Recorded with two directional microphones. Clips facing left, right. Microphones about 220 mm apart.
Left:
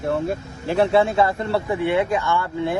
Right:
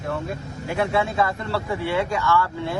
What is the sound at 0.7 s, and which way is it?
A man's voice, 30° left (ahead or behind).